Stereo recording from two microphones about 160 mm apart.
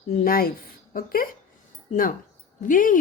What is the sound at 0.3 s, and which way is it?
A woman's voice, 65° left (ahead or behind).